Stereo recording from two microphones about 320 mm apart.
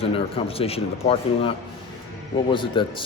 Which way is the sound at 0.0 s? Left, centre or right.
Centre.